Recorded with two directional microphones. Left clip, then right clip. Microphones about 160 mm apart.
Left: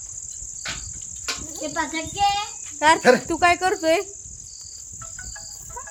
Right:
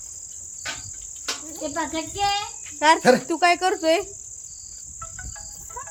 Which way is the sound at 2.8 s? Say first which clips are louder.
Left 1 dB; 40° left (ahead or behind).